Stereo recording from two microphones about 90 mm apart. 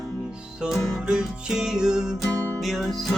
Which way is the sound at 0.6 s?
Centre (ahead or behind).